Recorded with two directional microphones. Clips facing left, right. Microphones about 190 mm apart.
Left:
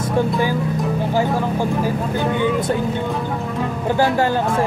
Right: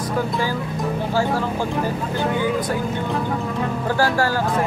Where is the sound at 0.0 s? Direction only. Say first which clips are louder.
Left 4 dB; 20° left (ahead or behind).